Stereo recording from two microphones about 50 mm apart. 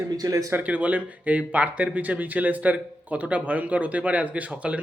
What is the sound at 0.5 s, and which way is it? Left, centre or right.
Speech, right.